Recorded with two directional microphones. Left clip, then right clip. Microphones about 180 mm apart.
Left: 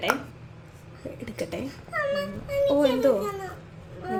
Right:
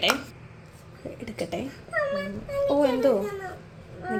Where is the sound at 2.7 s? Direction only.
Centre (ahead or behind).